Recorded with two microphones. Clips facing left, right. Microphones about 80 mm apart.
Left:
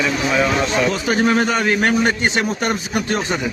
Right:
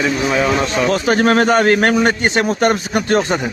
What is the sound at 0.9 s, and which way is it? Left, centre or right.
A man's voice, right.